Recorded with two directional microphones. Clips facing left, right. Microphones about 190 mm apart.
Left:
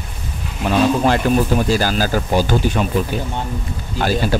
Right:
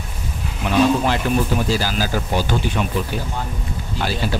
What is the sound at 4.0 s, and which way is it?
Speech, 45° left (ahead or behind).